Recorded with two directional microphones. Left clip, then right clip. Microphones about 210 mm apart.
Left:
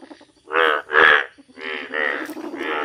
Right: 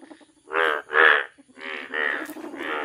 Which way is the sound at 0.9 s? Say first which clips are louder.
Left 3 dB; 5° left (ahead or behind).